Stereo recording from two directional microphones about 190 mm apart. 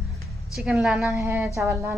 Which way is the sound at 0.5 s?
Centre (ahead or behind).